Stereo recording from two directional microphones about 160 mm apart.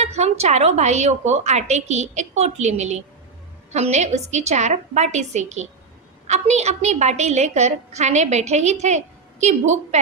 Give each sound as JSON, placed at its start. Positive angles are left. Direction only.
{"t": 0.0, "sound": "a woman's voice", "side_deg": -45}